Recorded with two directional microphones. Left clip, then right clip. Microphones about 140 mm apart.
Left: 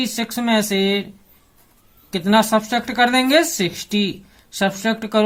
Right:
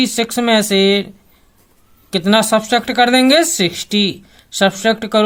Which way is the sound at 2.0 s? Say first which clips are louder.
Right 3 dB; 50° right (ahead or behind).